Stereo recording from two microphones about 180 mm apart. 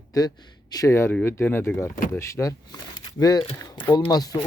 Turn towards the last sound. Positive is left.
turn(degrees=20)  # may be behind; listen again after turning